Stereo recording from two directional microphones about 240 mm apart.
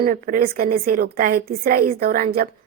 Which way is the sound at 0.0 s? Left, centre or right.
Right.